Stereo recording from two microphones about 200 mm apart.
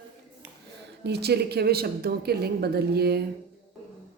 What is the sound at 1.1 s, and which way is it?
Speech, 55° right (ahead or behind).